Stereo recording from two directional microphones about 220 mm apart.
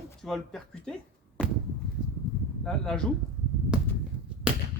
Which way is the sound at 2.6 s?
5° left (ahead or behind).